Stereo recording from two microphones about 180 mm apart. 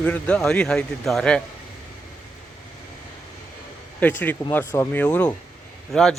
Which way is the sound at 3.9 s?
10° left (ahead or behind).